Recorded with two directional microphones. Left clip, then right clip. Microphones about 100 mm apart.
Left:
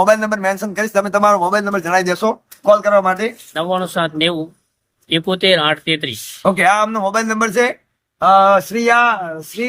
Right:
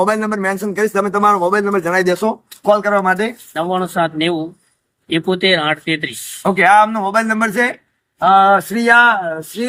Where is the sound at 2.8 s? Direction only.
Centre (ahead or behind).